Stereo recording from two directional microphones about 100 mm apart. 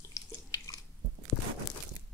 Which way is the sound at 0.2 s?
35° left (ahead or behind).